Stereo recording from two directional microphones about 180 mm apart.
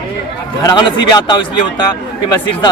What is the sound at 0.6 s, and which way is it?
Speech, 25° left (ahead or behind).